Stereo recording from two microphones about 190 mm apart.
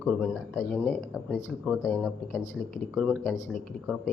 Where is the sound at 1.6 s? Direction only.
Centre (ahead or behind).